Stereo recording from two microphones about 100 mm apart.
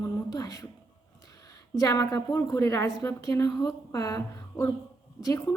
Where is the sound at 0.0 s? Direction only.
35° left (ahead or behind).